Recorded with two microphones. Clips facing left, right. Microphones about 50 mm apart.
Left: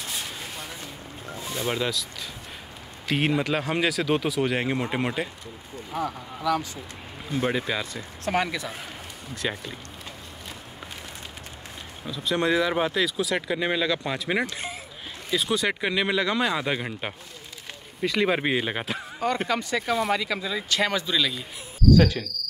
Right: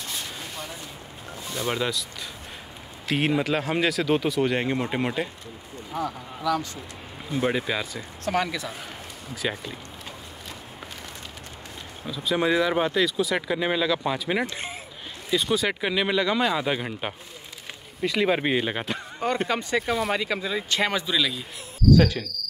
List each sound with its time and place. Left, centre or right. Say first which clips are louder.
1.5 s speech: even; centre
3.1 s speech: right 1 dB; centre
6.4 s speech: even; centre
7.3 s speech: right 1 dB; centre
8.3 s speech: even; centre
12.1 s speech: right 1 dB; centre
14.4 s speech: even; right
15.3 s speech: right 1 dB; centre
19.4 s speech: right 1 dB; right
21.0 s speech: even; centre